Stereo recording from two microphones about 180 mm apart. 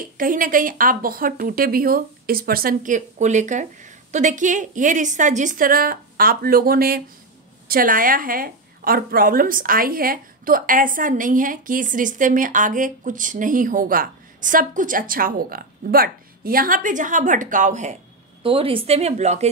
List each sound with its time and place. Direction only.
0.0 s a woman's voice: 50° right (ahead or behind)
18.4 s a woman's voice: 30° right (ahead or behind)